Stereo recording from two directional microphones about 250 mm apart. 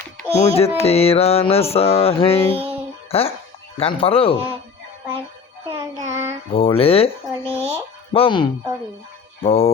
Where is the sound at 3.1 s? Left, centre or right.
Left.